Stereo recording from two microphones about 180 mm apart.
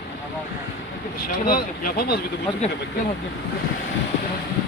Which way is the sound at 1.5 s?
55° left (ahead or behind).